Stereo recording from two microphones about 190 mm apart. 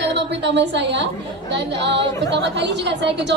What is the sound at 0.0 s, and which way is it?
A woman's voice, 65° right (ahead or behind).